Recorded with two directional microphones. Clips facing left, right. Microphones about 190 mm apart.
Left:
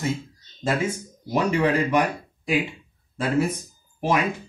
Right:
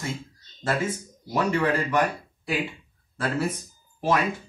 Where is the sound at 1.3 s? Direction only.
15° left (ahead or behind).